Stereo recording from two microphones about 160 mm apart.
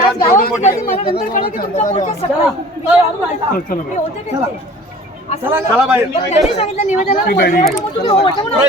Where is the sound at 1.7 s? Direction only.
50° left (ahead or behind).